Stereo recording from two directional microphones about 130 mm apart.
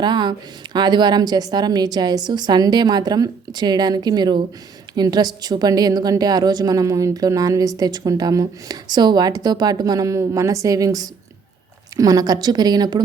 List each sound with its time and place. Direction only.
0.0 s a woman's voice: 35° right (ahead or behind)